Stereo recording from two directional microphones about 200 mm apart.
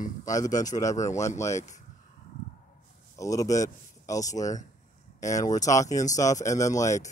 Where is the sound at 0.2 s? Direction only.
15° left (ahead or behind).